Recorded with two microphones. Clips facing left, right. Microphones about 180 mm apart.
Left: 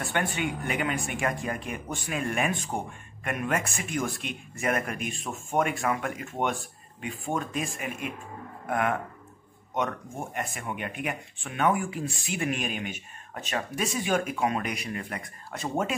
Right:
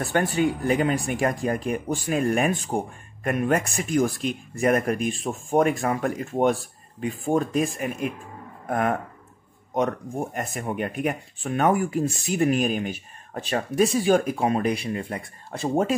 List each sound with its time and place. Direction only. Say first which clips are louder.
0.0 s speech: right 7 dB; 35° right (ahead or behind)